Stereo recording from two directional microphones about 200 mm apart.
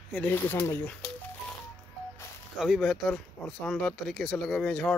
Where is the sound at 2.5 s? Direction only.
Centre (ahead or behind).